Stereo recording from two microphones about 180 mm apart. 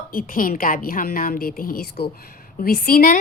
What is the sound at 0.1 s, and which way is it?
A woman's voice, 50° left (ahead or behind).